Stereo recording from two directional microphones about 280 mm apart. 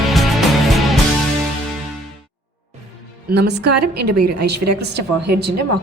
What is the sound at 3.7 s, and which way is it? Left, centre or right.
A woman's voice, right.